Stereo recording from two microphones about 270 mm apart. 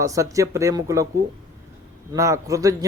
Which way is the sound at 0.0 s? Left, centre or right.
Centre.